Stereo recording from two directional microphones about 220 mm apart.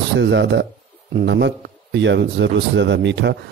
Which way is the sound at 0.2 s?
55° right (ahead or behind).